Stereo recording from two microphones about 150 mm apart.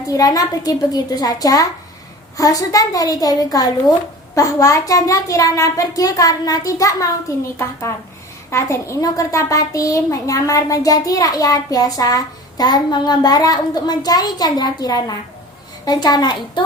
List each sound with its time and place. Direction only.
0.1 s a child's voice: 25° left (ahead or behind)